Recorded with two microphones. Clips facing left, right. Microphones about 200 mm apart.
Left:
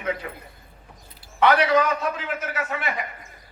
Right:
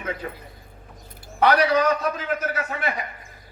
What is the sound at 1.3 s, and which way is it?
A man's voice, 40° right (ahead or behind).